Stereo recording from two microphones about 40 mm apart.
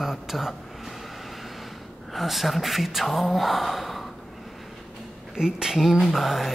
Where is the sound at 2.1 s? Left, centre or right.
Centre.